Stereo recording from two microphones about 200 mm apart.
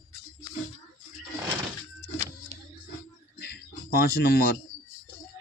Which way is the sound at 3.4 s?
55° left (ahead or behind).